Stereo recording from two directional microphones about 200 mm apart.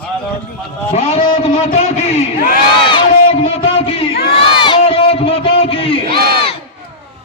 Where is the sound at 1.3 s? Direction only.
35° left (ahead or behind).